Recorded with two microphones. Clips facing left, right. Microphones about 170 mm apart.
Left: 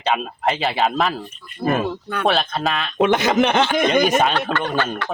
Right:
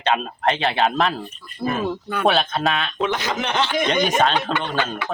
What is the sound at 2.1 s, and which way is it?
Speech, centre (ahead or behind).